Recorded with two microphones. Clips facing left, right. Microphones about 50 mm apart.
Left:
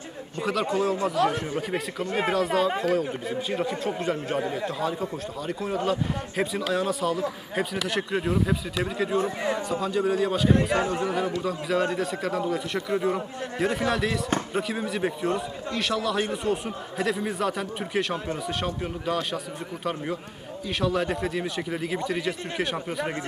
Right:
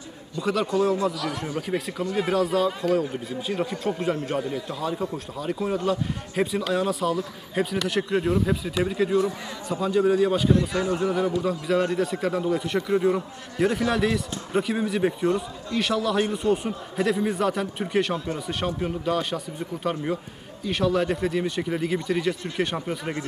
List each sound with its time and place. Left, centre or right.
0.4 s a man's voice: centre
2.0 s speech: left
2.3 s a man's voice: centre
9.1 s a man's voice: left
9.7 s a man's voice: centre
10.9 s a man's voice: centre